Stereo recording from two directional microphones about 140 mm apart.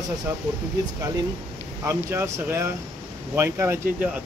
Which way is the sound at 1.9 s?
20° right (ahead or behind).